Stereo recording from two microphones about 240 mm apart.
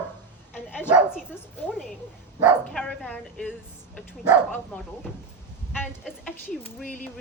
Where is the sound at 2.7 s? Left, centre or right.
Centre.